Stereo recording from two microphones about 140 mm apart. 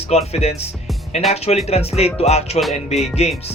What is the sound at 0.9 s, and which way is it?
Music, centre (ahead or behind).